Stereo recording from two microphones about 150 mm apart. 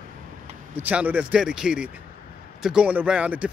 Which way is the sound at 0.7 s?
10° right (ahead or behind).